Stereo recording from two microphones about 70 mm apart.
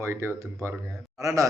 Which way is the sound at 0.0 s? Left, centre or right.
Right.